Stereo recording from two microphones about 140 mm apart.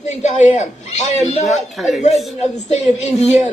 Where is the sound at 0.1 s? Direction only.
55° left (ahead or behind).